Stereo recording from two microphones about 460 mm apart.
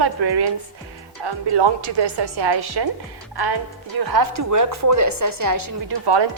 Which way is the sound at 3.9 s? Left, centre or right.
Right.